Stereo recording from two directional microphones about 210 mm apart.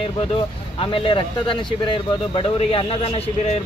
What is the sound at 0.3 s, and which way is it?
Speech, 25° left (ahead or behind).